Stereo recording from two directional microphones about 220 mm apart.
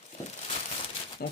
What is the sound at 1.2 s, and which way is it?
Speech, 45° left (ahead or behind).